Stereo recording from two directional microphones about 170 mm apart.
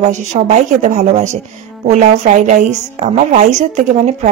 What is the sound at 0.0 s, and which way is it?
A woman's voice, 45° right (ahead or behind).